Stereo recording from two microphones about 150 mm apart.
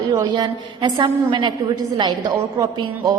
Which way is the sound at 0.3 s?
30° right (ahead or behind).